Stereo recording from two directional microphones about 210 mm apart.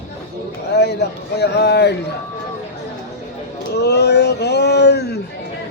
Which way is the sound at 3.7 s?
50° left (ahead or behind).